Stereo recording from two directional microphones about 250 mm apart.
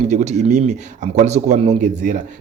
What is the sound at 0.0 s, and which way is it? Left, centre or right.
Speech, right.